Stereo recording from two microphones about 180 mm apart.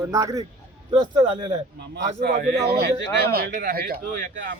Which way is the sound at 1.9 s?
70° right (ahead or behind).